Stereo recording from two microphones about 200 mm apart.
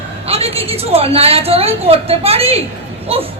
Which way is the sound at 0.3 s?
30° right (ahead or behind).